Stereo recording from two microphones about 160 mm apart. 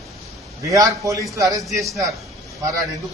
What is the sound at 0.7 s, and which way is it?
Speech, 20° right (ahead or behind).